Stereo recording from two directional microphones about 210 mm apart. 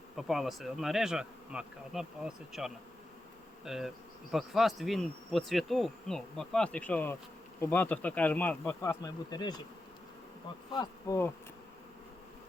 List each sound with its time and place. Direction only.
0.2 s insect: centre (ahead or behind)
7.6 s speech: 10° left (ahead or behind)
10.8 s speech: 15° left (ahead or behind)